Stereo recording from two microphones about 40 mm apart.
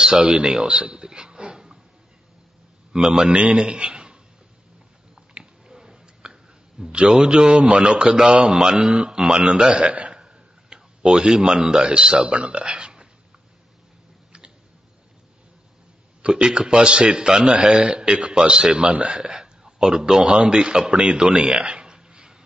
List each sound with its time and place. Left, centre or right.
0.0 s speech: right
0.5 s a sound: centre
2.9 s a man's voice: centre
5.1 s biting: centre
6.9 s a man's voice: right
16.2 s a man's voice: right